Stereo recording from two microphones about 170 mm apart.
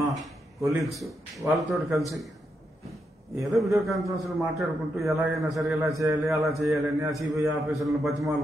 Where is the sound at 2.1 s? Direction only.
Centre (ahead or behind).